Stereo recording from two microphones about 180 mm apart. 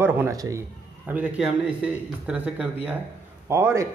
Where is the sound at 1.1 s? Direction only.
5° right (ahead or behind).